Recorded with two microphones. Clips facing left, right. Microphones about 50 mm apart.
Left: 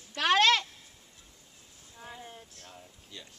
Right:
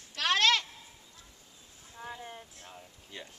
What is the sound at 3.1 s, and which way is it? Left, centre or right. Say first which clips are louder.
Speech: right 3 dB; right.